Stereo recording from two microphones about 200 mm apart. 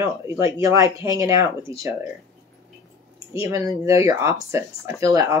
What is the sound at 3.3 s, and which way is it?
Speech, 15° right (ahead or behind).